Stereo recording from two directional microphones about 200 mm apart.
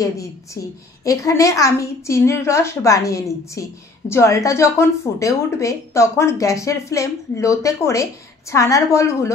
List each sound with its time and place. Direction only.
1.0 s speech: 15° left (ahead or behind)